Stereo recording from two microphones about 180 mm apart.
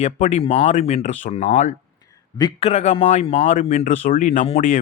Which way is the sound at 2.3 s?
25° left (ahead or behind).